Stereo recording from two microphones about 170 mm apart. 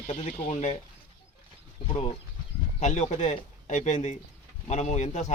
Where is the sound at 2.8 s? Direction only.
40° left (ahead or behind).